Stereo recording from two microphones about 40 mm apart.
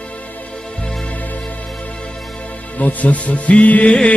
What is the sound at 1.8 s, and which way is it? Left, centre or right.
Music, left.